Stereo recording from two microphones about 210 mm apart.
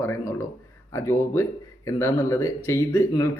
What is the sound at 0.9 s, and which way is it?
Speech, 15° left (ahead or behind).